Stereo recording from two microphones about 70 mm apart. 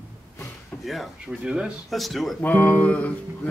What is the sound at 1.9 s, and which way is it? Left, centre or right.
Speech, centre.